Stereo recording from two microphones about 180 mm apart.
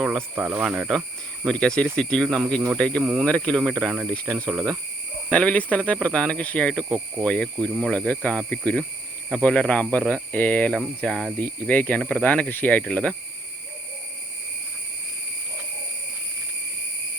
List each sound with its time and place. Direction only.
0.2 s speech: 10° right (ahead or behind); by 3.0 s 5° left (ahead or behind)
3.0 s speech: 5° right (ahead or behind)
3.2 s speech: 5° left (ahead or behind)
4.3 s speech: 20° right (ahead or behind)
5.3 s speech: 5° left (ahead or behind)